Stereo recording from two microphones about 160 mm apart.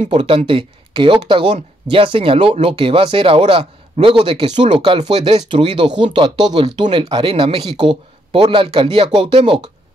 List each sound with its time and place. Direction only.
0.1 s speech: 35° right (ahead or behind)
5.3 s speech: 40° right (ahead or behind)